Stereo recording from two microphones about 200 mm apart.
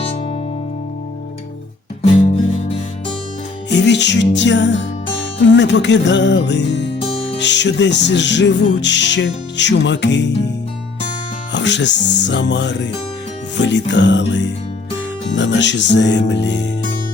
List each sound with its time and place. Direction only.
3.7 s music: 60° left (ahead or behind)
11.5 s music: 60° left (ahead or behind)